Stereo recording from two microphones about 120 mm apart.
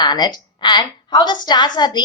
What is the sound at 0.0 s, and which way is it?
A woman's voice, 35° left (ahead or behind).